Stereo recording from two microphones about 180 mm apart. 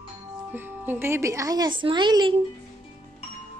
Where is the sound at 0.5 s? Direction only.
10° right (ahead or behind).